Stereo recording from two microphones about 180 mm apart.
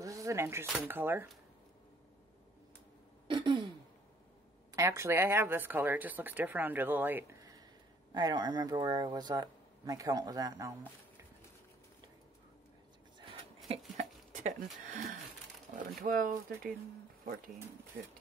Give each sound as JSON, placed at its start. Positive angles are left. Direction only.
{"t": 0.0, "sound": "a sound", "side_deg": -15}
{"t": 0.8, "sound": "speech", "side_deg": -10}
{"t": 3.3, "sound": "throat clearing", "side_deg": -25}
{"t": 4.7, "sound": "speech", "side_deg": -15}
{"t": 13.9, "sound": "a sound", "side_deg": -40}
{"t": 16.1, "sound": "speech", "side_deg": -50}